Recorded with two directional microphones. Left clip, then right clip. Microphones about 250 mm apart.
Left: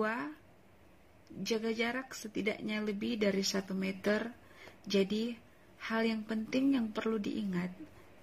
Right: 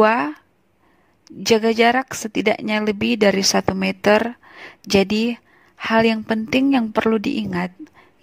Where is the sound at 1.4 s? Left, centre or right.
Right.